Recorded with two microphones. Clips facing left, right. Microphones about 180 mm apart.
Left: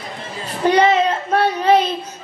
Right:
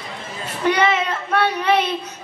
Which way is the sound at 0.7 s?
35° left (ahead or behind).